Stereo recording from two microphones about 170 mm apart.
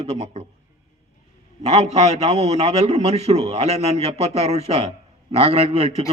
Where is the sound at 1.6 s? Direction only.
40° right (ahead or behind).